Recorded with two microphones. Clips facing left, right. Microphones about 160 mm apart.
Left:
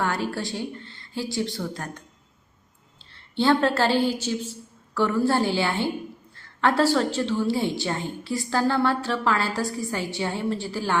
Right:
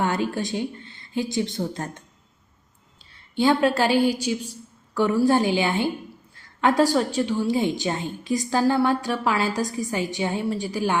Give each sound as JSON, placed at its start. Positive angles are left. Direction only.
{"t": 0.0, "sound": "a woman's voice", "side_deg": -20}
{"t": 3.1, "sound": "a woman's voice", "side_deg": -15}